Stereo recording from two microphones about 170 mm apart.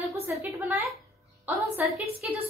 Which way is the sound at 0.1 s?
15° right (ahead or behind).